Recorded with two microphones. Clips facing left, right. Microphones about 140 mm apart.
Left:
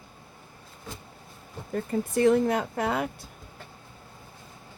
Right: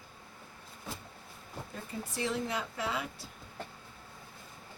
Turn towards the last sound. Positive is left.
turn(degrees=50)  # may be behind; listen again after turning